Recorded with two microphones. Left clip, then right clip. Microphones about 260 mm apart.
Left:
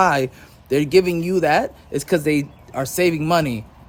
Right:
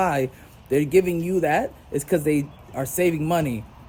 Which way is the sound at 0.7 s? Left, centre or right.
Centre.